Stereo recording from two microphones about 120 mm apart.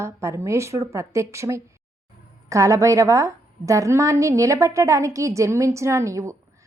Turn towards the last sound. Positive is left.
turn(degrees=-25)  # may be behind; listen again after turning